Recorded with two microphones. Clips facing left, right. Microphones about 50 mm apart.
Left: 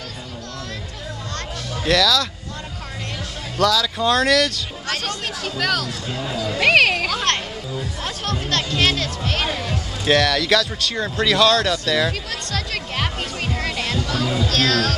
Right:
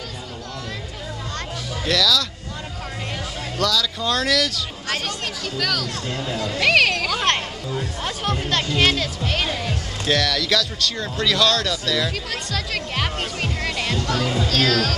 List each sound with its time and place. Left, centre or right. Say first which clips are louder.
1.9 s speech: left 3 dB; centre
3.5 s speech: left 4 dB; centre
5.4 s speech: left 3 dB; centre
8.0 s speech: right 1 dB; centre
12.3 s speech: even; centre
13.4 s music: left 2 dB; centre
14.0 s speech: even; centre